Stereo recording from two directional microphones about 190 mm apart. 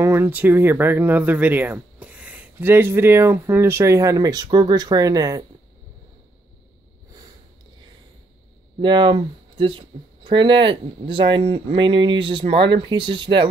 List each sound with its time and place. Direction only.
0.0 s speech: 10° right (ahead or behind)
8.7 s speech: 25° right (ahead or behind)